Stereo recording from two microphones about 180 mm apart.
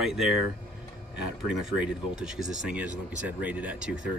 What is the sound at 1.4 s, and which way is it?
Speech, 5° right (ahead or behind).